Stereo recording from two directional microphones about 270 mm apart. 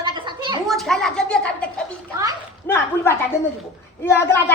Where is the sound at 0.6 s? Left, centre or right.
Centre.